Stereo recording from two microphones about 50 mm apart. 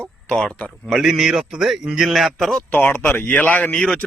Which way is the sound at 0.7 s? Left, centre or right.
Centre.